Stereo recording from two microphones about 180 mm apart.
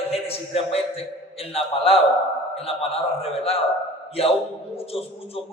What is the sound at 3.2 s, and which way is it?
Speech, 35° left (ahead or behind).